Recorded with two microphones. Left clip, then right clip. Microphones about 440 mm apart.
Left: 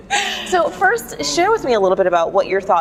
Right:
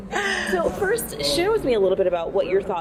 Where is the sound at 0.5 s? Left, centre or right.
Left.